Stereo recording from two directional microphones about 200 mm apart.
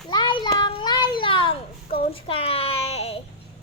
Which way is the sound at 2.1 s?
25° left (ahead or behind).